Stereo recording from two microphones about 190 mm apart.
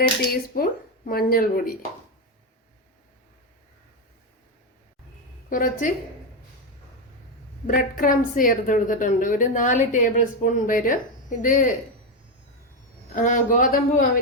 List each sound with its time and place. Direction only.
0.0 s a woman's voice: 50° left (ahead or behind)
5.5 s a woman's voice: 45° left (ahead or behind)
7.7 s a woman's voice: 45° left (ahead or behind)
13.2 s a woman's voice: 45° left (ahead or behind)